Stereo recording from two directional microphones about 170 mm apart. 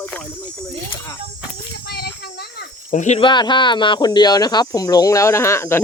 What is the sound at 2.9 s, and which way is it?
Speech, 45° left (ahead or behind).